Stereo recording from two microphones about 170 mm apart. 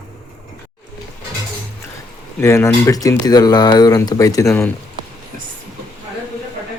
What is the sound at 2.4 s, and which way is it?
Speech, 15° left (ahead or behind).